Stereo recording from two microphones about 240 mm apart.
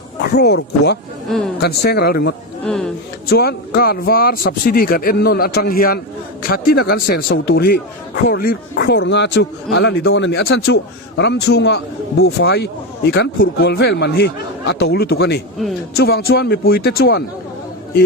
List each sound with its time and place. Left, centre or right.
0.2 s a man's voice: left
2.6 s speech: centre
3.2 s a man's voice: left